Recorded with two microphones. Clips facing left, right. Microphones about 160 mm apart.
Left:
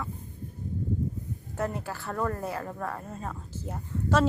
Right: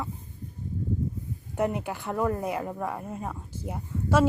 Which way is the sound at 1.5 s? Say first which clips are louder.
Right 4 dB; 15° right (ahead or behind).